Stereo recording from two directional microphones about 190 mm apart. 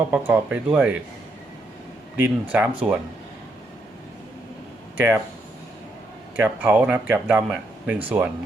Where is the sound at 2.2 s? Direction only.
5° right (ahead or behind).